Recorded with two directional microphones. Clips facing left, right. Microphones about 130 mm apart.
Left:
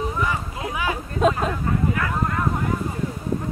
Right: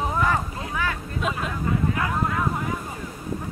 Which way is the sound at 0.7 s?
15° left (ahead or behind).